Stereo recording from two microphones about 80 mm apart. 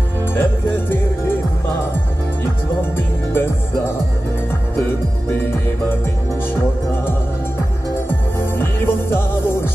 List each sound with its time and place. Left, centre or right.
0.3 s music: left
3.0 s music: left
8.1 s music: left